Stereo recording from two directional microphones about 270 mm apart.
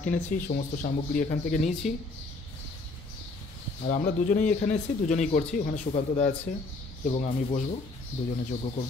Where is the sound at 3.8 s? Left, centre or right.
Left.